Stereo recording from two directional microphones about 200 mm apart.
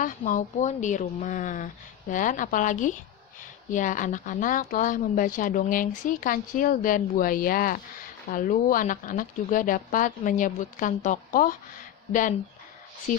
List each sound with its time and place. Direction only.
0.0 s speech: 40° left (ahead or behind)